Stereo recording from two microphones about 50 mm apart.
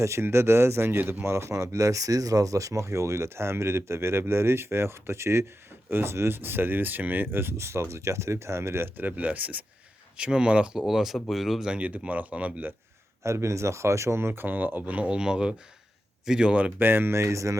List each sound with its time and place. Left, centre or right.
0.0 s speech: right
1.2 s speech: right
5.9 s speech: right
7.6 s speech: right
9.0 s speech: right
10.2 s speech: centre
10.8 s speech: centre
11.6 s speech: right
13.2 s speech: right
14.4 s speech: right
15.2 s speech: centre
16.8 s speech: right
17.2 s speech: right